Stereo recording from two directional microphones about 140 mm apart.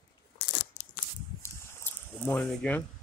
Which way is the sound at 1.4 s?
15° left (ahead or behind).